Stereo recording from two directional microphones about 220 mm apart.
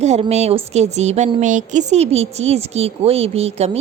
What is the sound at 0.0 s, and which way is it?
A woman's voice, 30° right (ahead or behind).